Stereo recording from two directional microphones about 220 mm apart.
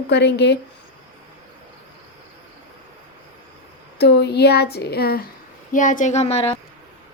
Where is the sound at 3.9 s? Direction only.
50° left (ahead or behind).